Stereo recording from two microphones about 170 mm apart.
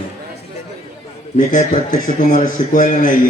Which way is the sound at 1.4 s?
50° left (ahead or behind).